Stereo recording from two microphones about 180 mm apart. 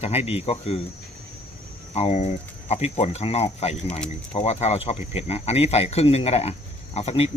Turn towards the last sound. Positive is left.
turn(degrees=35)  # may be behind; listen again after turning